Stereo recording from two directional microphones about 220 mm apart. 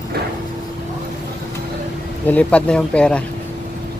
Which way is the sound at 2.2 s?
5° left (ahead or behind).